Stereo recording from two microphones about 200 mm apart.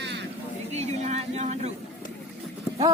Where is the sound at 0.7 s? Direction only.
35° right (ahead or behind).